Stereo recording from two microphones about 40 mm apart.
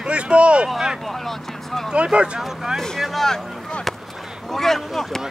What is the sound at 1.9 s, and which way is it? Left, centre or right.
Speech, right.